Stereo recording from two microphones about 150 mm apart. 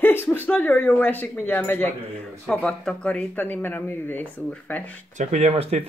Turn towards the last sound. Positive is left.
turn(degrees=-40)  # may be behind; listen again after turning